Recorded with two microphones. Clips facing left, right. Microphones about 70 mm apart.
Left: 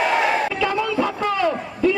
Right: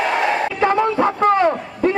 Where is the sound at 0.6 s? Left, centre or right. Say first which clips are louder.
Right 5 dB; right.